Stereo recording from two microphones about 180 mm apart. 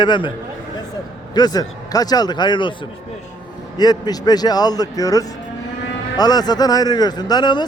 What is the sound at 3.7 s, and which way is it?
Speech, 20° left (ahead or behind).